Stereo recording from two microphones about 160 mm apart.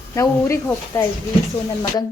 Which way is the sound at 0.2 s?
15° left (ahead or behind).